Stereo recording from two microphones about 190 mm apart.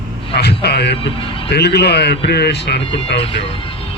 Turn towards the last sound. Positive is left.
turn(degrees=30)  # may be behind; listen again after turning